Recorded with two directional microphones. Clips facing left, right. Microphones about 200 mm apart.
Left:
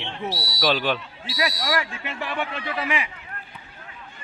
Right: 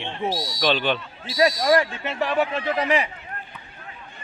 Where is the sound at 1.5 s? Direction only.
45° right (ahead or behind).